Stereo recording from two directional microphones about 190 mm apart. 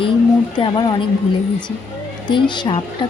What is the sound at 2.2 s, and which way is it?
Speech, 25° left (ahead or behind).